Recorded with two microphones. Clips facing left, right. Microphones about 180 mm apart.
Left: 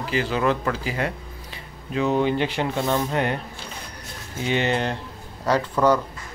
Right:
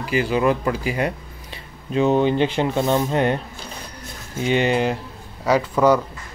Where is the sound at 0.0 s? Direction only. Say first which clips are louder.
Right 3 dB; 10° right (ahead or behind).